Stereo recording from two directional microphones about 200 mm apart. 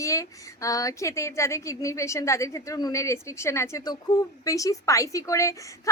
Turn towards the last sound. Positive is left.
turn(degrees=15)  # may be behind; listen again after turning